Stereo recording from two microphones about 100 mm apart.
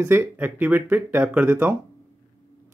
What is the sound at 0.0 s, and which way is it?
Speech, 25° right (ahead or behind).